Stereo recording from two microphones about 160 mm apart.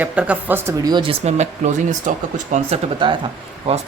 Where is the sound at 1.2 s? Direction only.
45° right (ahead or behind).